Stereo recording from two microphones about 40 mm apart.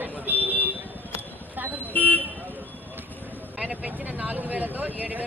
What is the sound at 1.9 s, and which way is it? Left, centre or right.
Speech, left.